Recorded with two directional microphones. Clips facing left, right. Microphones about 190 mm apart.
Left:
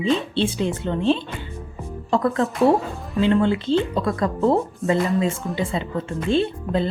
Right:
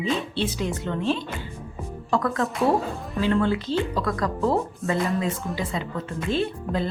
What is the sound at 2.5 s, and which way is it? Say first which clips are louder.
Speech: left 4 dB; centre (ahead or behind).